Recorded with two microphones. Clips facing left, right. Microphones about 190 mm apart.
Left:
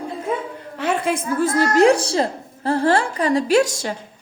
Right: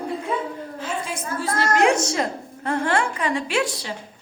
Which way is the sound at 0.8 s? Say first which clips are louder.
Left 10 dB; 65° left (ahead or behind).